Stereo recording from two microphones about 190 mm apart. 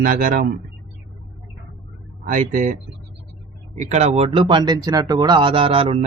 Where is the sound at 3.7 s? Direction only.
40° right (ahead or behind).